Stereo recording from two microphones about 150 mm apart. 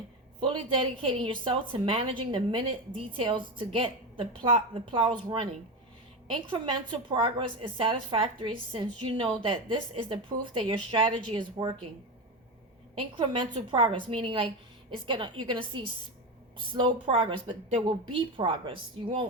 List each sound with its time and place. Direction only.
0.3 s a woman's voice: 35° right (ahead or behind)
13.0 s a woman's voice: 35° right (ahead or behind)